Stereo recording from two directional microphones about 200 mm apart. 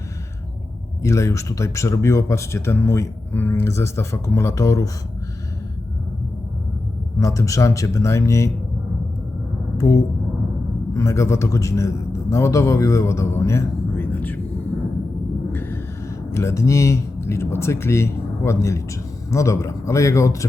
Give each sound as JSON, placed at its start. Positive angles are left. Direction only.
{"t": 1.0, "sound": "speech", "side_deg": 15}
{"t": 7.2, "sound": "speech", "side_deg": 15}
{"t": 9.7, "sound": "a man's voice", "side_deg": 15}
{"t": 15.5, "sound": "speech", "side_deg": 10}